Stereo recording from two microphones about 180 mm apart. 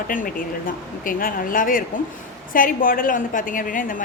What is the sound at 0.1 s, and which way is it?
A woman's voice, 50° left (ahead or behind).